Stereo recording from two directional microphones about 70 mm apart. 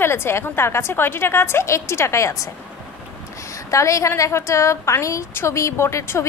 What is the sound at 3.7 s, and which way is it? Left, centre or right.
A woman's voice, left.